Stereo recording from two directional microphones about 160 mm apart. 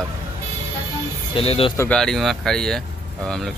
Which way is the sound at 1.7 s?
15° left (ahead or behind).